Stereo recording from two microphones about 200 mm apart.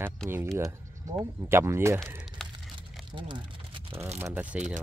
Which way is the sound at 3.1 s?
25° right (ahead or behind).